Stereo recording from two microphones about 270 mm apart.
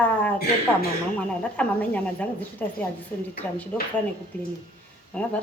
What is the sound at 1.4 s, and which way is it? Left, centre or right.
A woman's voice, centre.